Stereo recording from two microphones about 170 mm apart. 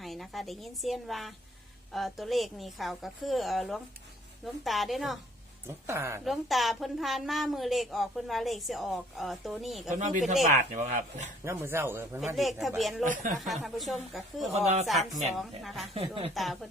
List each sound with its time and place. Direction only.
0.0 s a woman's voice: centre (ahead or behind)
5.6 s a man's voice: 15° right (ahead or behind)
6.2 s a woman's voice: centre (ahead or behind)
9.9 s speech: 45° right (ahead or behind)
11.4 s a man's voice: 15° right (ahead or behind)
12.4 s a woman's voice: centre (ahead or behind)
14.5 s speech: 40° right (ahead or behind)
15.4 s a woman's voice: centre (ahead or behind)
16.0 s speech: 35° right (ahead or behind)
16.3 s a woman's voice: centre (ahead or behind)